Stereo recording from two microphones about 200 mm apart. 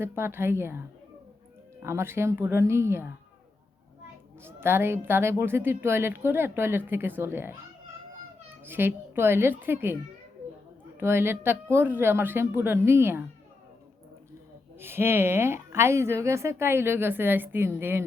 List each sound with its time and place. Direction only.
0.0 s a woman's voice: 10° right (ahead or behind)
1.8 s a woman's voice: 15° right (ahead or behind)
4.4 s a woman's voice: 10° right (ahead or behind)
8.6 s a woman's voice: 10° right (ahead or behind)
11.0 s a woman's voice: 10° right (ahead or behind)
14.8 s a woman's voice: 10° right (ahead or behind)